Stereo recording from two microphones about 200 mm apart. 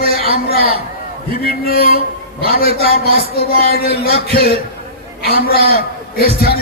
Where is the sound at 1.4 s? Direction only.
50° left (ahead or behind).